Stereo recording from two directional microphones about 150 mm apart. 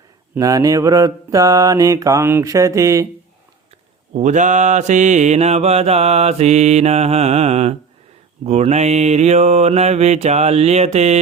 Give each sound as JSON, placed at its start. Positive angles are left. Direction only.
{"t": 0.3, "sound": "mantra", "side_deg": -20}
{"t": 4.1, "sound": "mantra", "side_deg": -55}